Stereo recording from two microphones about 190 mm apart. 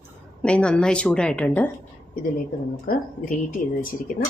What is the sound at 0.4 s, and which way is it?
A woman's voice, 5° left (ahead or behind).